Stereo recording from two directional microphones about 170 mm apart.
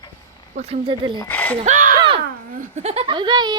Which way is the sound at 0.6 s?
40° right (ahead or behind).